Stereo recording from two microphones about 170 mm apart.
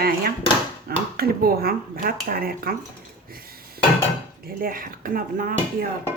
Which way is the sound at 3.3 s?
60° right (ahead or behind).